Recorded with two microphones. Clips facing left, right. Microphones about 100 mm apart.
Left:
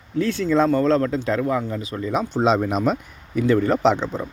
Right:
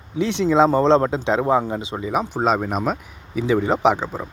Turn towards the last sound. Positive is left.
turn(degrees=-10)  # may be behind; listen again after turning